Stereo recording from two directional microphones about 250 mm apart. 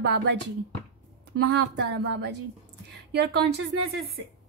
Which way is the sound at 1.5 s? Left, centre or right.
Right.